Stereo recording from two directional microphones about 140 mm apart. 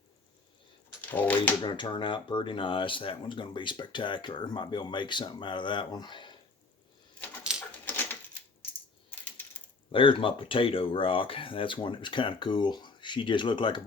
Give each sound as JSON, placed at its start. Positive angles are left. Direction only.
{"t": 1.1, "sound": "speech", "side_deg": 10}
{"t": 1.6, "sound": "speech", "side_deg": 35}
{"t": 7.5, "sound": "dog", "side_deg": -5}
{"t": 7.9, "sound": "typewriter", "side_deg": 15}
{"t": 9.9, "sound": "speech", "side_deg": 40}